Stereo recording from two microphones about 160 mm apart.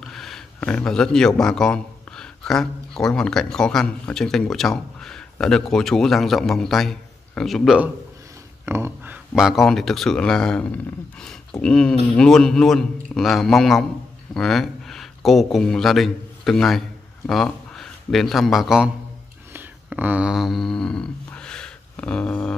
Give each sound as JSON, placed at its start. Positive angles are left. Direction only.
{"t": 0.0, "sound": "speech", "side_deg": 0}
{"t": 8.6, "sound": "speech", "side_deg": -15}
{"t": 19.5, "sound": "a sound", "side_deg": -10}